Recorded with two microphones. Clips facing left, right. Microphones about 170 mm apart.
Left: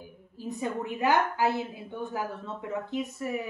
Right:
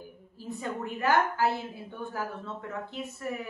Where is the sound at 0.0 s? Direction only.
15° left (ahead or behind).